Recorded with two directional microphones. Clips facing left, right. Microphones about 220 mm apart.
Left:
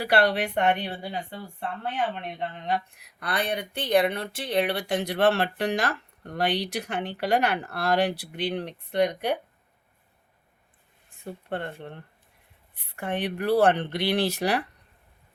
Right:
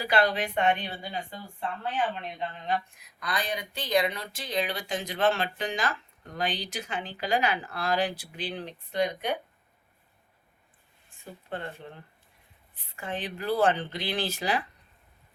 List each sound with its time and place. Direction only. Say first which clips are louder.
0.0 s speech: left 3 dB; 65° left (ahead or behind)
2.4 s speech: left 2 dB; 65° left (ahead or behind)
11.4 s speech: left 3 dB; 65° left (ahead or behind)